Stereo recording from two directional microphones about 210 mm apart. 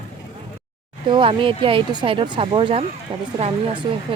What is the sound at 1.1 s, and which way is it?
Speech, 25° right (ahead or behind).